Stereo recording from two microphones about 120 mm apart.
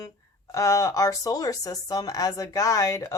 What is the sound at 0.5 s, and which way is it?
A woman's voice, 25° left (ahead or behind).